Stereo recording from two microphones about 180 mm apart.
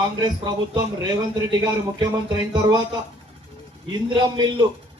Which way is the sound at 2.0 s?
25° right (ahead or behind).